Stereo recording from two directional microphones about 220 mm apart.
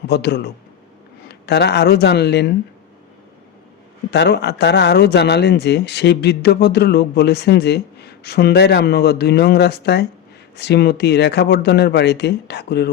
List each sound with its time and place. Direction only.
0.1 s speech: 50° left (ahead or behind)
4.1 s speech: 50° left (ahead or behind)